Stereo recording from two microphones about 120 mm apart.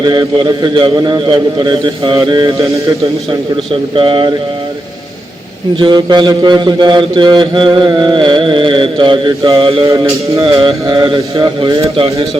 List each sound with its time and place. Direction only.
0.0 s mantra: 35° right (ahead or behind)
2.6 s a sound: 25° right (ahead or behind)
3.9 s mantra: 45° right (ahead or behind)
5.8 s mantra: 40° right (ahead or behind)
9.8 s a sound: 30° right (ahead or behind)
10.6 s mantra: 45° right (ahead or behind)
11.9 s speech: 55° right (ahead or behind)